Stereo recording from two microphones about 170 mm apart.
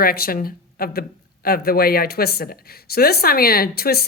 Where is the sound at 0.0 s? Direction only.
60° left (ahead or behind).